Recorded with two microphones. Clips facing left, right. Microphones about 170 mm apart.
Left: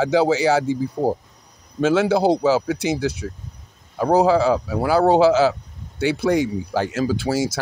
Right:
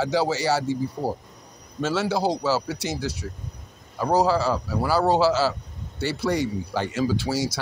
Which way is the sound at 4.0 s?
55° left (ahead or behind).